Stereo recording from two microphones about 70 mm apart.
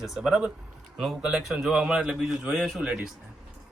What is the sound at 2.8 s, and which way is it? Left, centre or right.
Speech, centre.